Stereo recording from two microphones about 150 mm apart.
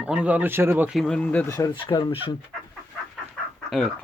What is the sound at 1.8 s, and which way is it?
Speech, 35° left (ahead or behind).